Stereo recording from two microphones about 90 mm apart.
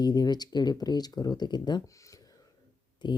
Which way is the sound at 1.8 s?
35° left (ahead or behind).